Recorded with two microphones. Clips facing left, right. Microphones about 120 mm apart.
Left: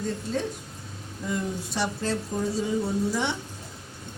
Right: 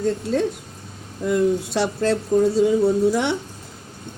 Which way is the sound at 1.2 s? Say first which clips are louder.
Right 11 dB; 65° right (ahead or behind).